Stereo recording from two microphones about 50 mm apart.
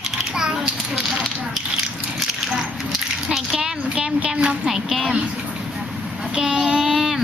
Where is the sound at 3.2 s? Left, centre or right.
Centre.